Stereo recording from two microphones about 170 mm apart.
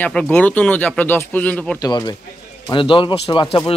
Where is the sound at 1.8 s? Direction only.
25° left (ahead or behind).